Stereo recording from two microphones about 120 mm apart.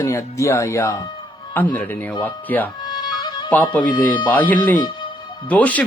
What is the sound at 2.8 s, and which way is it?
Music, 35° left (ahead or behind).